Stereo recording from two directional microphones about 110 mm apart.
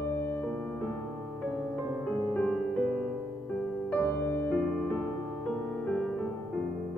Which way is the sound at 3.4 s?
10° left (ahead or behind).